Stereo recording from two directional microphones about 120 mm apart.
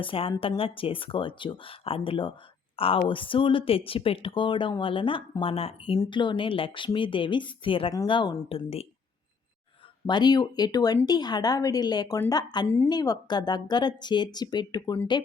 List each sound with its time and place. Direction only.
0.0 s speech: 45° left (ahead or behind)
6.0 s speech: 40° left (ahead or behind)
10.1 s speech: 35° left (ahead or behind)
12.6 s a woman's voice: 20° left (ahead or behind)
12.9 s speech: 35° left (ahead or behind)